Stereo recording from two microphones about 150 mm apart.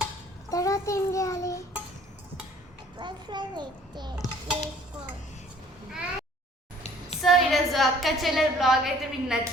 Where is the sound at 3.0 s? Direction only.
30° right (ahead or behind).